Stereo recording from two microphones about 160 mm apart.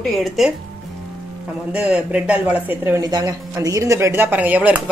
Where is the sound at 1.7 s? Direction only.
5° right (ahead or behind).